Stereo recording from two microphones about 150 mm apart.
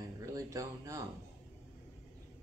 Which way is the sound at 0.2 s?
25° right (ahead or behind).